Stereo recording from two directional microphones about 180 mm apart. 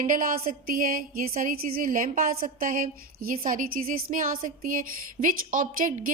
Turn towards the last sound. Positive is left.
turn(degrees=-45)  # may be behind; listen again after turning